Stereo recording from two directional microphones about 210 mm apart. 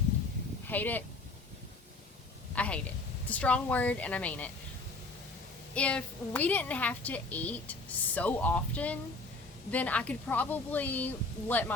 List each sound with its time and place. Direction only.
0.7 s a woman's voice: 10° left (ahead or behind)
2.6 s a woman's voice: 5° left (ahead or behind)
5.7 s a woman's voice: 5° left (ahead or behind)